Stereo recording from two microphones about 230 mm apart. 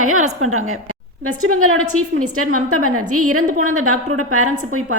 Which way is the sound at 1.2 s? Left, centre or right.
Right.